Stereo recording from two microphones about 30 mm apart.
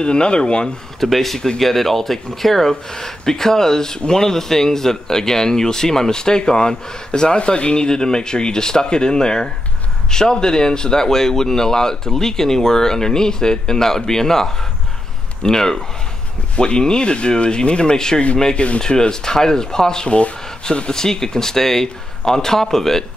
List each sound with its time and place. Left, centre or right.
0.0 s speech: left
0.9 s speech: centre; by 18.2 s left
18.5 s speech: left
18.8 s speech: left
20.1 s speech: left
20.9 s speech: centre